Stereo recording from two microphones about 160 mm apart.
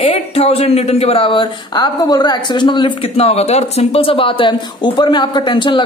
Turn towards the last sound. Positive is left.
turn(degrees=30)  # may be behind; listen again after turning